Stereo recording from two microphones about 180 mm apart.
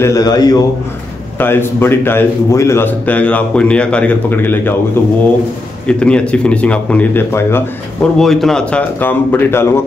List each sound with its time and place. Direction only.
0.0 s a man's voice: 20° left (ahead or behind)
8.2 s a man's voice: centre (ahead or behind)